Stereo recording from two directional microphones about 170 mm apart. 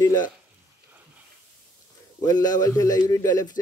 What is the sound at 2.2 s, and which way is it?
A man's voice, 25° left (ahead or behind).